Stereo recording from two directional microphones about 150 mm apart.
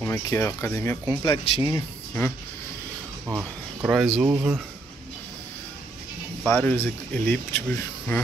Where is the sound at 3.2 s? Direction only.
10° right (ahead or behind).